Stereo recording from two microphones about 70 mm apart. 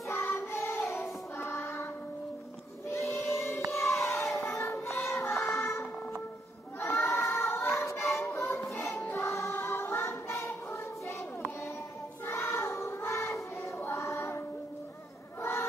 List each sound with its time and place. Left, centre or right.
0.1 s child singing: left
1.4 s music: left
2.9 s choir: left
3.7 s a sound: left
4.4 s child singing: left
5.2 s music: left
6.8 s a sound: left
7.4 s music: left
8.7 s music: left
12.3 s child singing: left
13.7 s choir: left